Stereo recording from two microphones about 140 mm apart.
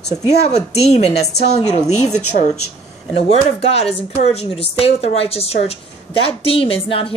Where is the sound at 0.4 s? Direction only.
50° left (ahead or behind).